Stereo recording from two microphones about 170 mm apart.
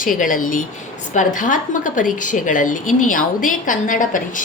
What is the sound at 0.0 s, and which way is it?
A woman's voice, 50° left (ahead or behind).